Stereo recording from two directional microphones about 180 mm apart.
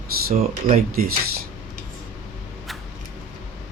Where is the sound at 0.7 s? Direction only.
50° right (ahead or behind).